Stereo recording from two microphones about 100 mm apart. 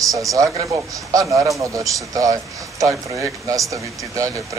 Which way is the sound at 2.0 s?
35° right (ahead or behind).